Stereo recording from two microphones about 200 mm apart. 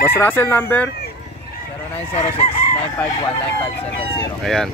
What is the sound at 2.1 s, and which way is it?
Chicken, 30° left (ahead or behind).